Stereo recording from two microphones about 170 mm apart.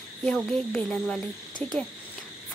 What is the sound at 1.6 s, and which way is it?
Speech, 10° left (ahead or behind).